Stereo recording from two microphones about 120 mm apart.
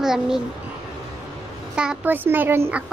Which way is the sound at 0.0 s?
5° right (ahead or behind).